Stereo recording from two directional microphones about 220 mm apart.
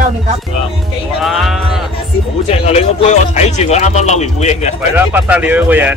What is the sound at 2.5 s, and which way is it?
Speech, 30° left (ahead or behind).